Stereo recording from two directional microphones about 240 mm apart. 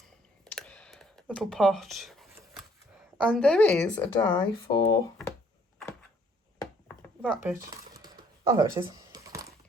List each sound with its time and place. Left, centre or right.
0.4 s a sound: centre
3.2 s a woman's voice: centre
3.8 s speech: centre
7.2 s a woman's voice: centre
7.6 s a sound: right
8.0 s typing: centre